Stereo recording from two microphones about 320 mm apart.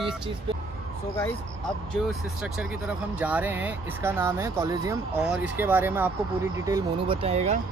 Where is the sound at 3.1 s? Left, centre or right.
Centre; by 7.6 s right.